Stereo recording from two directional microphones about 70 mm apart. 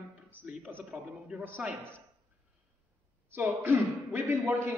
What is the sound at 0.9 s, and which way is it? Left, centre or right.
Speech, centre.